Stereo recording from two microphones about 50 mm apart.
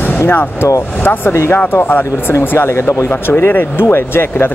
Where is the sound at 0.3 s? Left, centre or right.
Left.